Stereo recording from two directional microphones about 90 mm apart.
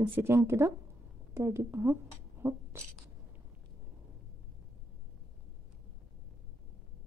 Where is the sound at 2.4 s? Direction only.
25° right (ahead or behind).